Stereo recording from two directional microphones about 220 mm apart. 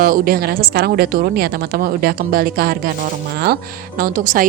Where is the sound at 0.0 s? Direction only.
40° right (ahead or behind).